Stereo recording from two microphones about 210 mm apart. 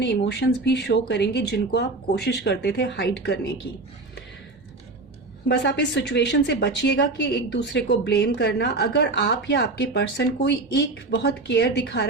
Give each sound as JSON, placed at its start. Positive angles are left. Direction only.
{"t": 0.0, "sound": "speech", "side_deg": 55}
{"t": 5.5, "sound": "speech", "side_deg": 55}